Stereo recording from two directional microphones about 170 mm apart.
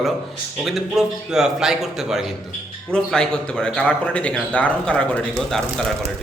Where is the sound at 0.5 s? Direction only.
Centre (ahead or behind).